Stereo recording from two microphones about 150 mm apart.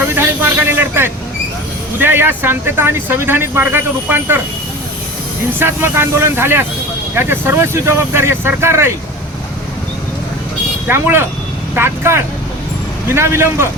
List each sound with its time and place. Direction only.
0.1 s speech: 15° right (ahead or behind)
5.5 s speech: 15° right (ahead or behind)
10.8 s speech: 15° right (ahead or behind)